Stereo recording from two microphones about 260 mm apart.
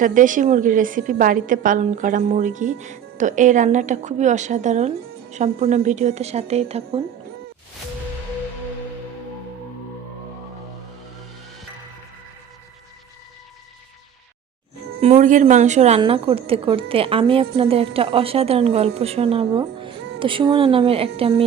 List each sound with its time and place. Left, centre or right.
0.0 s a woman's voice: right
15.0 s a woman's voice: right